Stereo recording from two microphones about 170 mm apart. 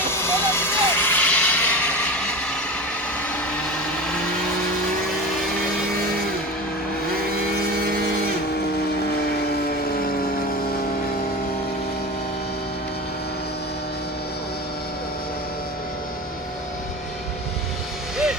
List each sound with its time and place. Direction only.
0.1 s vehicle: 15° left (ahead or behind)
3.6 s vehicle: 5° left (ahead or behind)
9.2 s vehicle: 65° left (ahead or behind)